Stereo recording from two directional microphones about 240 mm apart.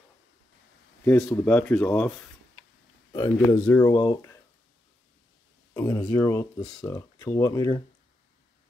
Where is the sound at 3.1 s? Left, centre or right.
Centre.